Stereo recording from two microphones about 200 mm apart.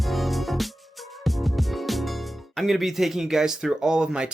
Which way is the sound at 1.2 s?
Centre (ahead or behind).